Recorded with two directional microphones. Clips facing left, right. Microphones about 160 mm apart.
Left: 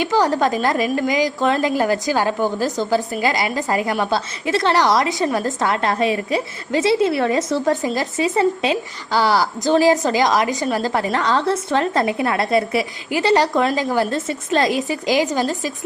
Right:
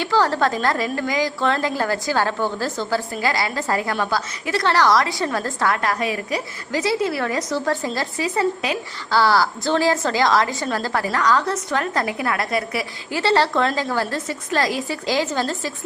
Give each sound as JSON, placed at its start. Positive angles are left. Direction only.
{"t": 0.0, "sound": "a woman's voice", "side_deg": 20}